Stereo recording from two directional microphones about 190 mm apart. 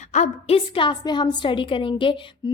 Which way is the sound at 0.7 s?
25° left (ahead or behind).